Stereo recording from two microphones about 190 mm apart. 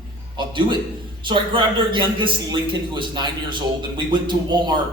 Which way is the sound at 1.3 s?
25° right (ahead or behind).